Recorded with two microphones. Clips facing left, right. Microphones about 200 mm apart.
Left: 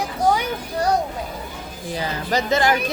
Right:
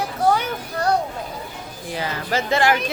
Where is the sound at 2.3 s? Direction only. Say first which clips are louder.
Even; 40° left (ahead or behind).